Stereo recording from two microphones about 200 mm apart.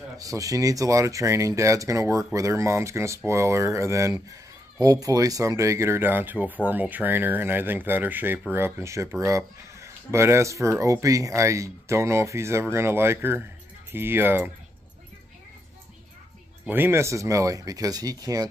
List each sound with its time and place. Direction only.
0.2 s speech: 15° right (ahead or behind)
16.6 s speech: 10° right (ahead or behind)